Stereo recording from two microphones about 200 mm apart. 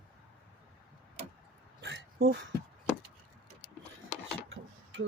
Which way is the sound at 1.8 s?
65° right (ahead or behind).